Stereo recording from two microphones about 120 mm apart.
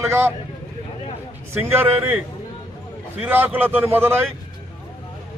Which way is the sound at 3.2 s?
15° right (ahead or behind).